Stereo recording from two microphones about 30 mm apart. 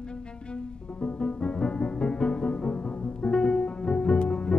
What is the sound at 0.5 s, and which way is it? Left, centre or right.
Music, left.